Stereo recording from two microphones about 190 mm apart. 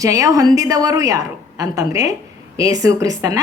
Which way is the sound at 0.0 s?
15° right (ahead or behind).